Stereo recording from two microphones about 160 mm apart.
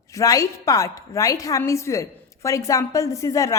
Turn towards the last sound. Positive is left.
turn(degrees=20)  # may be behind; listen again after turning